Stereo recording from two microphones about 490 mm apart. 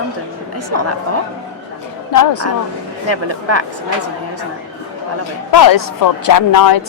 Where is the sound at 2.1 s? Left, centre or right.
Left.